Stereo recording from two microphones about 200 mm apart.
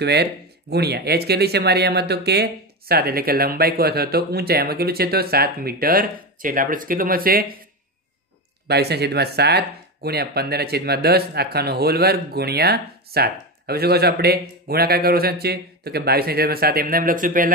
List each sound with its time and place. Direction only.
0.0 s speech: 55° right (ahead or behind)
8.6 s speech: 55° right (ahead or behind)